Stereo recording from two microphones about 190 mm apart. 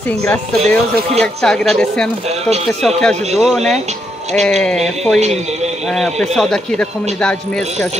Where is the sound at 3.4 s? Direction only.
Centre (ahead or behind).